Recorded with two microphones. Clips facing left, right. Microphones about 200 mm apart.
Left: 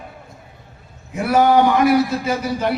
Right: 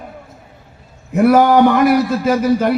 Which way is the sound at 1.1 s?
50° right (ahead or behind).